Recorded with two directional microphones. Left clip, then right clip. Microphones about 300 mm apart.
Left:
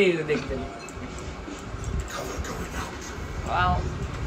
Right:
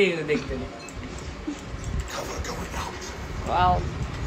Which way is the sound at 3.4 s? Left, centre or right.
Centre.